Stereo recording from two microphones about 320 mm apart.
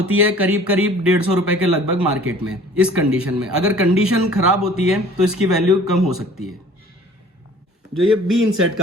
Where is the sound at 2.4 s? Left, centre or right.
Centre.